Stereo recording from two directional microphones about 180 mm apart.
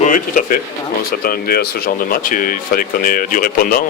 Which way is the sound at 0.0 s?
50° left (ahead or behind).